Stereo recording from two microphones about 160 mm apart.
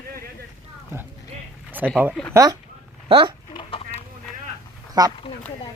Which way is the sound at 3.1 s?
35° right (ahead or behind).